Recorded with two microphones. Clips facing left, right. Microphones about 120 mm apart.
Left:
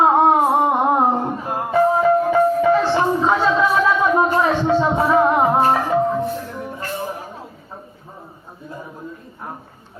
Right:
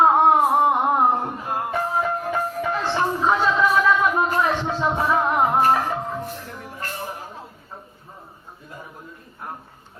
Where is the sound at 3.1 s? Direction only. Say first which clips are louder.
Left 3 dB; 30° left (ahead or behind).